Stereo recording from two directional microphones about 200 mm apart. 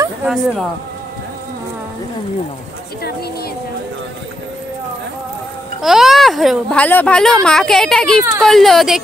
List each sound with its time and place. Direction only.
0.2 s speech: centre (ahead or behind)
5.8 s speech: centre (ahead or behind)